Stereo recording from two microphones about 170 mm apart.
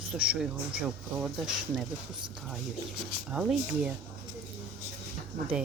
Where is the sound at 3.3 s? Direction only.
5° right (ahead or behind).